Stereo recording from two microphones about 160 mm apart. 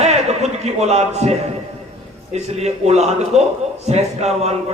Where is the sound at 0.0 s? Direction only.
45° right (ahead or behind).